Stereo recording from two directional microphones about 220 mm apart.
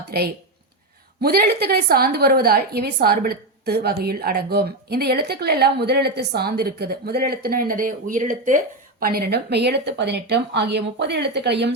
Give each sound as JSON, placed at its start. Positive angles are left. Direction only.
{"t": 0.1, "sound": "a woman's voice", "side_deg": -45}